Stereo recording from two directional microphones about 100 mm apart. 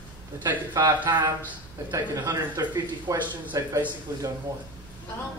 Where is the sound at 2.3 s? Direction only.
40° right (ahead or behind).